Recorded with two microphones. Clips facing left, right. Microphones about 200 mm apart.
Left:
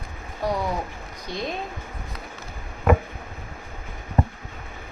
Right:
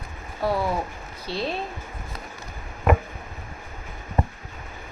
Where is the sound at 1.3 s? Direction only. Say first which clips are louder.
Right 2 dB; 15° left (ahead or behind).